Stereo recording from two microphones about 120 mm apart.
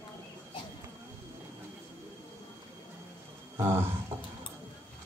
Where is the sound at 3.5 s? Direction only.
20° right (ahead or behind).